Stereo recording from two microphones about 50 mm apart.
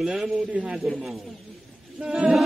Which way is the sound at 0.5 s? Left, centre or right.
Right.